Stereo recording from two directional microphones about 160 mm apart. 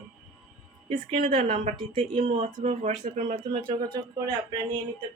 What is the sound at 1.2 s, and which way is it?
Speech, 45° right (ahead or behind).